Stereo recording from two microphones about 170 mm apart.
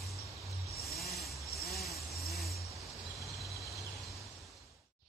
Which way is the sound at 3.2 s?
Centre (ahead or behind).